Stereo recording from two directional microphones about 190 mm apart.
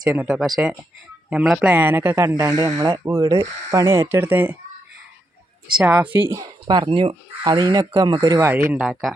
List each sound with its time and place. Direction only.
0.0 s speech: 5° right (ahead or behind)
5.7 s speech: 5° right (ahead or behind)
6.3 s speech: 20° right (ahead or behind); by 9.1 s centre (ahead or behind)